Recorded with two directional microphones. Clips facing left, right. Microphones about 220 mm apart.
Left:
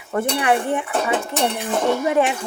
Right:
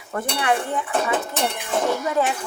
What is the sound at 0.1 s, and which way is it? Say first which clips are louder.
Speech: left 4 dB; 20° left (ahead or behind).